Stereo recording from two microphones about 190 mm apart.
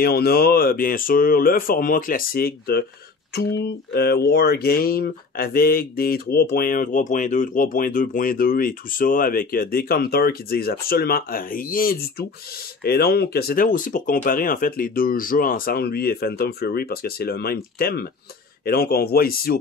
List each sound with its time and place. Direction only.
0.0 s speech: 55° left (ahead or behind)